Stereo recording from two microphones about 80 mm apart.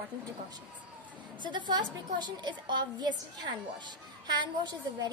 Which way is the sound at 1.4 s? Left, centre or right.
Right.